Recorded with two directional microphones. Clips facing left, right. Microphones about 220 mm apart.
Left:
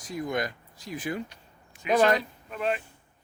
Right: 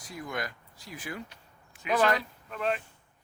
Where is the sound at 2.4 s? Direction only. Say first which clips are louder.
Left 1 dB; 5° left (ahead or behind).